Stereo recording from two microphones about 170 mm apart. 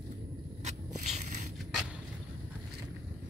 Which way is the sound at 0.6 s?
40° right (ahead or behind).